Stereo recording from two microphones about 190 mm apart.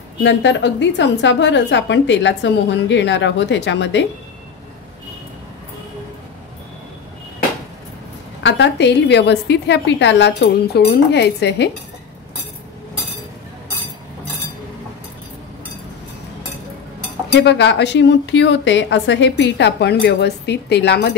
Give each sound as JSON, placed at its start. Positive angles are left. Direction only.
{"t": 0.2, "sound": "a woman's voice", "side_deg": 70}
{"t": 8.4, "sound": "a woman's voice", "side_deg": 70}
{"t": 17.3, "sound": "a woman's voice", "side_deg": 65}